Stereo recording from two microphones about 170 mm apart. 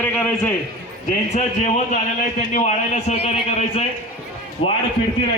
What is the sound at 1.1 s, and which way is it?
A man's voice, 45° left (ahead or behind).